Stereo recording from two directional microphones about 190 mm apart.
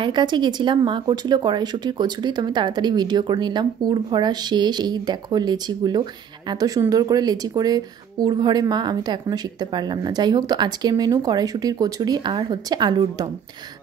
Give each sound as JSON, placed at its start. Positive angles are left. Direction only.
{"t": 0.0, "sound": "speech", "side_deg": -25}